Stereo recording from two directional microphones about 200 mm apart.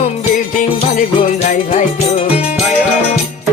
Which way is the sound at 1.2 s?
35° left (ahead or behind).